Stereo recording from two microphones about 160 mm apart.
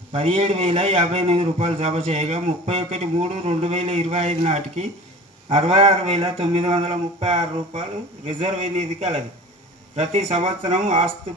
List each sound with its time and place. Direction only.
0.1 s a man's voice: 35° right (ahead or behind)